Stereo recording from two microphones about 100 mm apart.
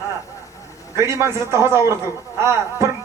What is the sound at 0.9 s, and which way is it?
A man's voice, 30° right (ahead or behind).